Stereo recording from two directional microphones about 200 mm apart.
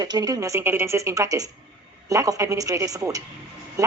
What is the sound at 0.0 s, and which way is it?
A woman's voice, 20° right (ahead or behind).